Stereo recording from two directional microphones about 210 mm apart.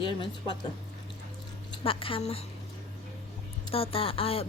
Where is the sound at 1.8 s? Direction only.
25° left (ahead or behind).